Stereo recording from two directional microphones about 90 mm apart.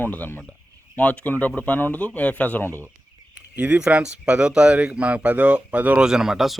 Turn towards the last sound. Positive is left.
turn(degrees=-5)  # may be behind; listen again after turning